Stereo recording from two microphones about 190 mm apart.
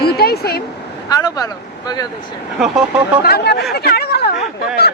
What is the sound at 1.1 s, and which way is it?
Speech, 20° left (ahead or behind).